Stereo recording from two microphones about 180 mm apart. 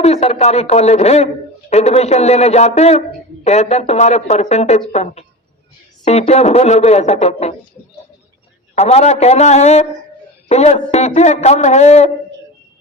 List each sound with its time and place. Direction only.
0.0 s speech: 35° left (ahead or behind)
8.7 s speech: 35° left (ahead or behind)